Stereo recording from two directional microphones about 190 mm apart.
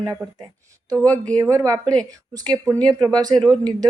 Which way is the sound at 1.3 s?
15° right (ahead or behind).